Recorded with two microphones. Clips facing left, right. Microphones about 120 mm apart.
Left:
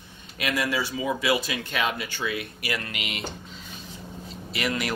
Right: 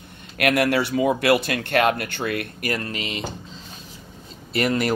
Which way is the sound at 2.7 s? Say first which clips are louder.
Right 4 dB; 35° right (ahead or behind).